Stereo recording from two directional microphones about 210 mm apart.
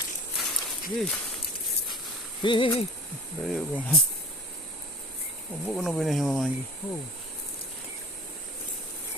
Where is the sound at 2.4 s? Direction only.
25° left (ahead or behind).